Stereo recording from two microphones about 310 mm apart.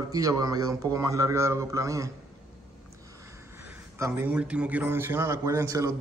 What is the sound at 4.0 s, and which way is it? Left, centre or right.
A man's voice, centre.